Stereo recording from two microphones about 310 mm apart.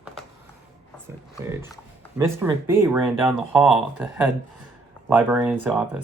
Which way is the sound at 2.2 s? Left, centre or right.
Centre.